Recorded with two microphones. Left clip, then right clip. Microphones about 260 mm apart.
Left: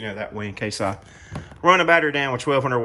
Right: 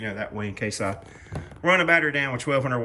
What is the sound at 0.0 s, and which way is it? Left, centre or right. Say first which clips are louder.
Speech: left 1 dB; centre.